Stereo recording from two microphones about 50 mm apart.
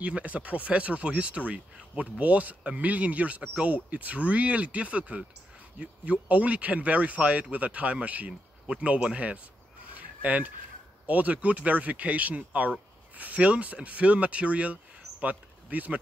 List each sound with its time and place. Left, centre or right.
0.0 s speech: right
6.2 s speech: right
9.8 s fowl: right
11.1 s speech: right